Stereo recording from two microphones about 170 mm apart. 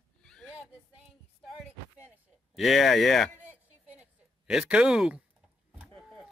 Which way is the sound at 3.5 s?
10° right (ahead or behind).